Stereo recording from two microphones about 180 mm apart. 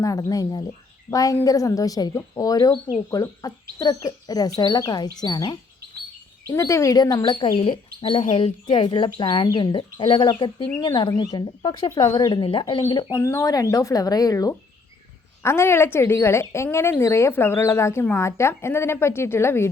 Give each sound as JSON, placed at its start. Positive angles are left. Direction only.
{"t": 0.0, "sound": "a woman's voice", "side_deg": 20}